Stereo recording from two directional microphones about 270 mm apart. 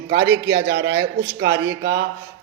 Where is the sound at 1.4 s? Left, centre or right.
Right.